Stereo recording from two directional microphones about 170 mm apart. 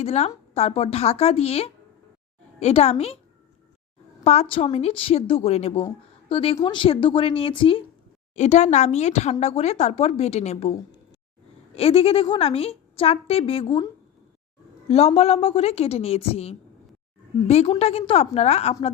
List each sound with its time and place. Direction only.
0.0 s a woman's voice: 40° left (ahead or behind)
4.2 s a woman's voice: 40° left (ahead or behind)
8.4 s a woman's voice: 45° left (ahead or behind)